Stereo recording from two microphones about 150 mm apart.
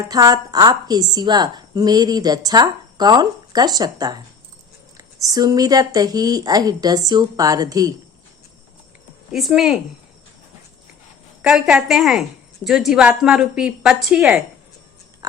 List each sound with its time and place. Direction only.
0.1 s a woman's voice: 25° right (ahead or behind)
9.3 s a woman's voice: 5° right (ahead or behind)
11.4 s a woman's voice: 5° right (ahead or behind)